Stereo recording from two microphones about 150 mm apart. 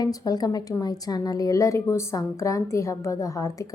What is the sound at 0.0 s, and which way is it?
A woman's voice, 25° left (ahead or behind).